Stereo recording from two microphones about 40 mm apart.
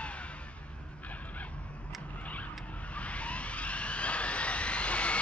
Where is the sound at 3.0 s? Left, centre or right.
Left.